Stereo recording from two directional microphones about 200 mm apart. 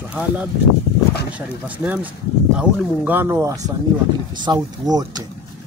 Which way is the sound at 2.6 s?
10° right (ahead or behind).